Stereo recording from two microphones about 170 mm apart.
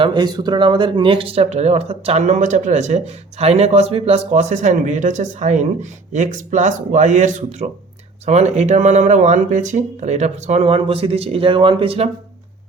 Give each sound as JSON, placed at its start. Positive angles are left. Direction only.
{"t": 0.0, "sound": "speech", "side_deg": -25}